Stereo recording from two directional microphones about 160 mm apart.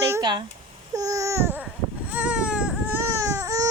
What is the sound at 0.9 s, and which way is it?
Babbling, 20° right (ahead or behind).